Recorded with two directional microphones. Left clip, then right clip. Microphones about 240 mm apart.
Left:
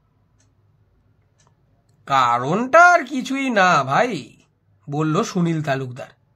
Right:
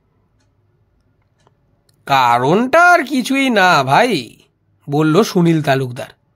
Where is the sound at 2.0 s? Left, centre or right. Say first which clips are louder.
Right 5 dB; right.